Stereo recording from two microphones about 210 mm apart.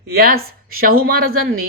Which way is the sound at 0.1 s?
45° right (ahead or behind).